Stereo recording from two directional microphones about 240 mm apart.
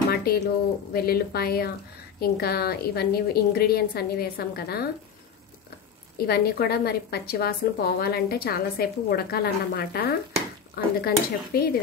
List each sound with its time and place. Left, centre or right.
0.1 s a sound: left
0.9 s a woman's voice: left
6.1 s a woman's voice: left